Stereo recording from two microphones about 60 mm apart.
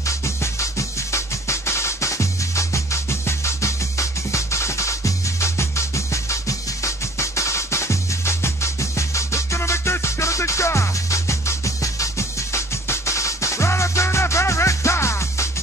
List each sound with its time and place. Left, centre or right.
0.0 s music: left